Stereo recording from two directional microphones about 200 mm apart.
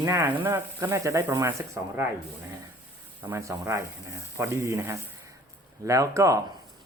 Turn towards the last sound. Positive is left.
turn(degrees=-15)  # may be behind; listen again after turning